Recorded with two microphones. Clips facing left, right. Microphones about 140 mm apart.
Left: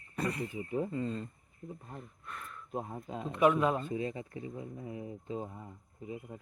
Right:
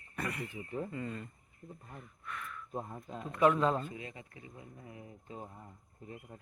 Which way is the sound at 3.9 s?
30° left (ahead or behind).